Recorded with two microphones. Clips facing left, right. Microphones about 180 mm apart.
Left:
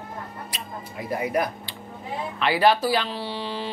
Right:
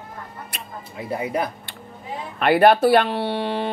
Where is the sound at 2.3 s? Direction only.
55° right (ahead or behind).